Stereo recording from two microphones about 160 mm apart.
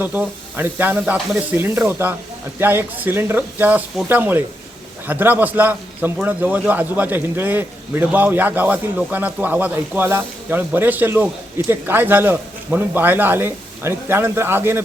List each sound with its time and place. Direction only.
0.0 s a man's voice: 10° right (ahead or behind)